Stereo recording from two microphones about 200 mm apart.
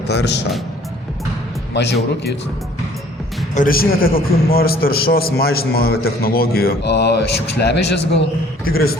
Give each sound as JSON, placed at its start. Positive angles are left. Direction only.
{"t": 0.1, "sound": "speech", "side_deg": 55}
{"t": 1.7, "sound": "a man's voice", "side_deg": 60}
{"t": 3.5, "sound": "a man's voice", "side_deg": 45}